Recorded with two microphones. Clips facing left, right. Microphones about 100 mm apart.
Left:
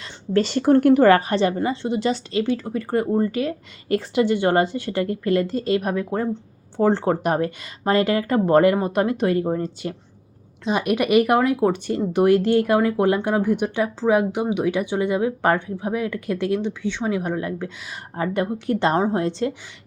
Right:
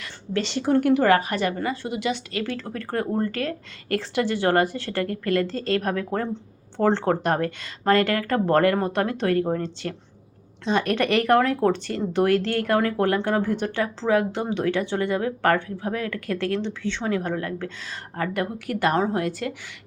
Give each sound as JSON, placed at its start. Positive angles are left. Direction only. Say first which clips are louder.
{"t": 0.3, "sound": "speech", "louder": "left 5 dB", "side_deg": 45}
{"t": 1.0, "sound": "a woman's voice", "louder": "left 4 dB", "side_deg": 35}
{"t": 2.3, "sound": "a woman's voice", "louder": "left 7 dB", "side_deg": 20}
{"t": 2.6, "sound": "a woman's voice", "louder": "left 5 dB", "side_deg": 10}